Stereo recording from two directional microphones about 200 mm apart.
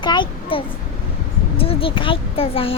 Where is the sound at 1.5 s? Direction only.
25° left (ahead or behind).